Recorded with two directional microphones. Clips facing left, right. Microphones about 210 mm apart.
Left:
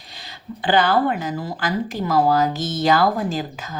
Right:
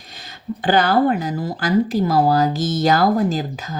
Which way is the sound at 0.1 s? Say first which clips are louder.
Right 6 dB; 45° right (ahead or behind).